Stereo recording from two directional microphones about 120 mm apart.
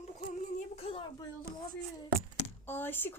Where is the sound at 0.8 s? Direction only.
55° left (ahead or behind).